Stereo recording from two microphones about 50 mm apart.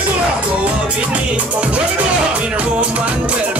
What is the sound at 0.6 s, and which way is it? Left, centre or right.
Music, right.